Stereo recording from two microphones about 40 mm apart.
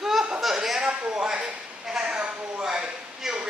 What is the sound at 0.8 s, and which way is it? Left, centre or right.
A woman's voice, right.